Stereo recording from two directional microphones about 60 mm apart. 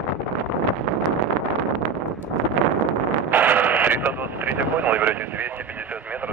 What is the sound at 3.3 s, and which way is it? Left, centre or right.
Vehicle, right.